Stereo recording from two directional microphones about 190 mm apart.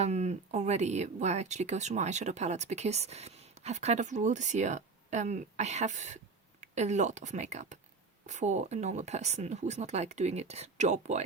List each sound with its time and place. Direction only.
0.0 s speech: 35° right (ahead or behind)